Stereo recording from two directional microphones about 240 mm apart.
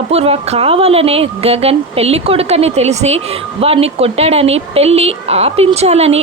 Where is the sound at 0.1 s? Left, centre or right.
Right.